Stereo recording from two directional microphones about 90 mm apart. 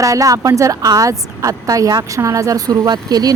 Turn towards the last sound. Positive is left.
turn(degrees=-45)  # may be behind; listen again after turning